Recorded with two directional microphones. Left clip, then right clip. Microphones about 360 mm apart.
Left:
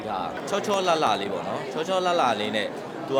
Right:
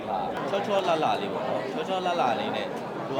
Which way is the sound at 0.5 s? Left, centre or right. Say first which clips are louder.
Left 2 dB; left.